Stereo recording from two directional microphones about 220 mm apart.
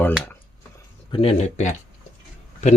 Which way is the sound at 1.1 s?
25° left (ahead or behind).